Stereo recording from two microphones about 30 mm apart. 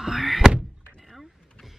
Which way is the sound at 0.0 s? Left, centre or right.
Centre.